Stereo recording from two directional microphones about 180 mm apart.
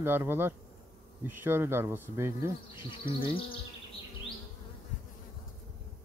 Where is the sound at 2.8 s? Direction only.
25° left (ahead or behind).